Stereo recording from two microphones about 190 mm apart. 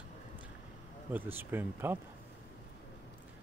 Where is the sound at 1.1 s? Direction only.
10° right (ahead or behind).